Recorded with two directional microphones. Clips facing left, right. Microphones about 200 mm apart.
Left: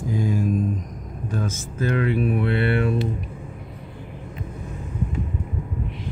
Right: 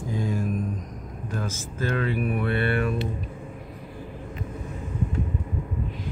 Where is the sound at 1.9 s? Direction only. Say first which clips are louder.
Left 5 dB; 20° left (ahead or behind).